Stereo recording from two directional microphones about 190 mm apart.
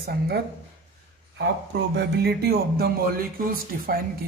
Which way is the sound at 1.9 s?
60° right (ahead or behind).